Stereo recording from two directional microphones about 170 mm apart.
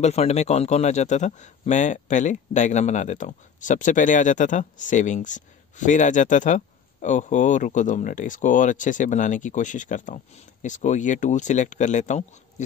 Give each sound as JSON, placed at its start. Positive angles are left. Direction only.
{"t": 0.0, "sound": "a man's voice", "side_deg": 40}